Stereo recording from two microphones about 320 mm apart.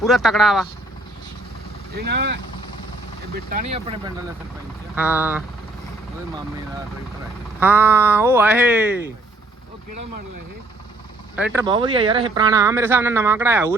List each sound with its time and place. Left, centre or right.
0.0 s speech: centre
2.0 s speech: right
4.9 s speech: centre
7.6 s speech: centre
11.3 s speech: centre